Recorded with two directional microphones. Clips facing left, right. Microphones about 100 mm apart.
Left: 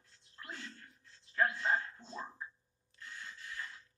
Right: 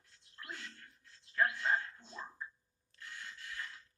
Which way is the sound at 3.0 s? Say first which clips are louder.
Even; 25° left (ahead or behind).